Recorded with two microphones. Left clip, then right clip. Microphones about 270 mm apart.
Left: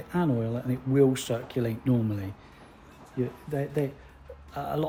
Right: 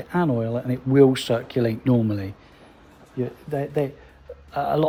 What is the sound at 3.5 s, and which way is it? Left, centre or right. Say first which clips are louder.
Speech: right 7 dB; right.